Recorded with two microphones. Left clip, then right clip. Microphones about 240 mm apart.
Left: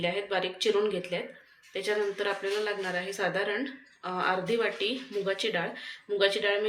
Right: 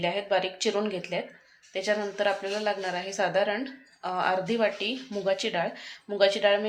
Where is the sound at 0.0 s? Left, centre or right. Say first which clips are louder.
Right 3 dB; right.